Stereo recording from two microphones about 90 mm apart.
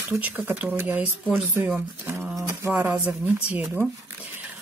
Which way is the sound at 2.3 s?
35° right (ahead or behind).